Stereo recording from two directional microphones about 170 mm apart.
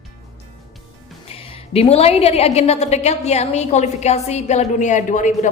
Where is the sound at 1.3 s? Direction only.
35° left (ahead or behind).